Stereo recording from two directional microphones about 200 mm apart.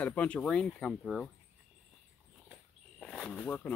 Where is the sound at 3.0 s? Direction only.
5° left (ahead or behind).